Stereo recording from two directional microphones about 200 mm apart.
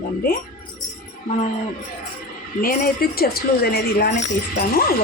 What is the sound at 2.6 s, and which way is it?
Speech, 45° left (ahead or behind).